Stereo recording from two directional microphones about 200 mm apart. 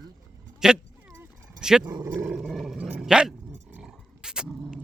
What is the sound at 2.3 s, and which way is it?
Dog, centre (ahead or behind).